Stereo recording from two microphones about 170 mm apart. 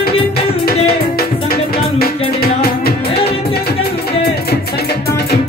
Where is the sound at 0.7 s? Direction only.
65° left (ahead or behind).